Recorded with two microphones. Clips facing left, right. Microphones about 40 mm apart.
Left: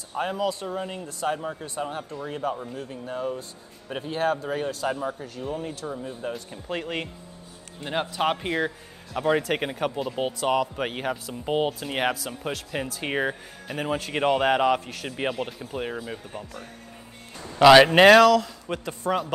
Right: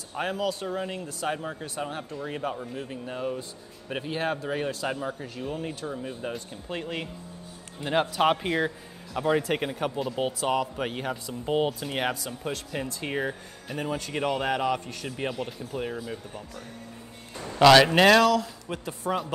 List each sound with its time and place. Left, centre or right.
0.1 s speech: centre
6.7 s speech: centre
7.8 s speech: centre; by 13.4 s left
13.7 s speech: centre
14.1 s speech: left
18.2 s speech: centre